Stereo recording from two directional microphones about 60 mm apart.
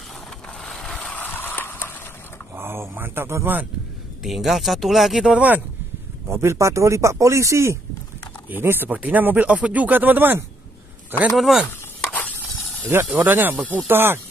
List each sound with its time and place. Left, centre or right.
0.6 s a sound: centre
0.9 s a sound: left
2.5 s a sound: right
4.2 s speech: centre
6.2 s speech: right
8.5 s a man's voice: right
11.3 s speech: centre
12.1 s spray: left
13.1 s speech: right